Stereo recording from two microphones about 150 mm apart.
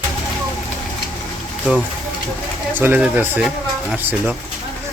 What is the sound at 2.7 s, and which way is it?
Speech, 10° right (ahead or behind).